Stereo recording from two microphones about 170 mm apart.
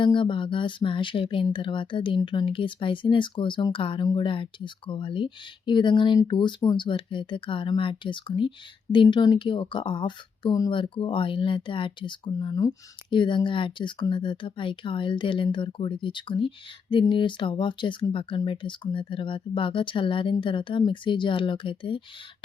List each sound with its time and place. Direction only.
0.0 s speech: 30° left (ahead or behind)